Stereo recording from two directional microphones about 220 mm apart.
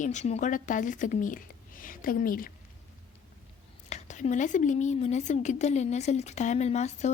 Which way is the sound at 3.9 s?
30° left (ahead or behind).